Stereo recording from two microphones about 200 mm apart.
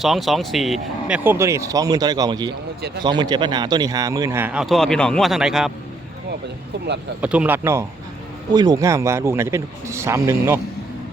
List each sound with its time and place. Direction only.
0.0 s a man's voice: centre (ahead or behind)
6.7 s speech: 55° right (ahead or behind)
7.2 s a man's voice: 5° right (ahead or behind)